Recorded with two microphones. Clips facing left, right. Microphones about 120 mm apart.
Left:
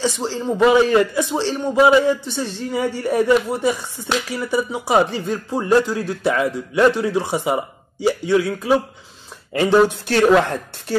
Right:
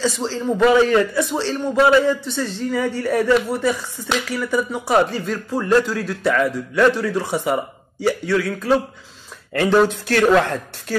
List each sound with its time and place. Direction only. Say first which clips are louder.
0.0 s speech: even; 15° left (ahead or behind)